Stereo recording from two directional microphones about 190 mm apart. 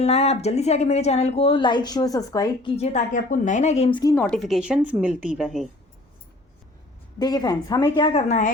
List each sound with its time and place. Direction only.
0.0 s a woman's voice: 35° left (ahead or behind); by 2.7 s 15° left (ahead or behind)
2.7 s a woman's voice: 35° left (ahead or behind)
4.1 s a woman's voice: 5° left (ahead or behind)
7.2 s speech: 20° left (ahead or behind)